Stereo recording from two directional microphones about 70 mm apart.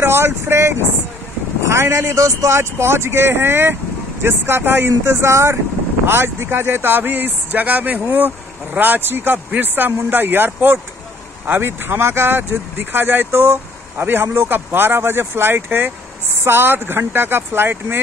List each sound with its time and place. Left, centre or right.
0.0 s speech: right